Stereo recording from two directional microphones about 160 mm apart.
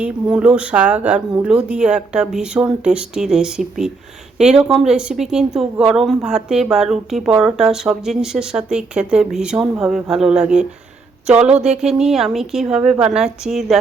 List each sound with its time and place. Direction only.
0.0 s a woman's voice: 5° right (ahead or behind)